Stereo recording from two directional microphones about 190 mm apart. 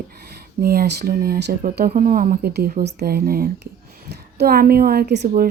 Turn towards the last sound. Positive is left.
turn(degrees=-60)  # may be behind; listen again after turning